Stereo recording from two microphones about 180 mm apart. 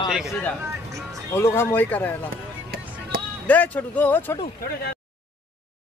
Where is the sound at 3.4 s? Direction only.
10° left (ahead or behind).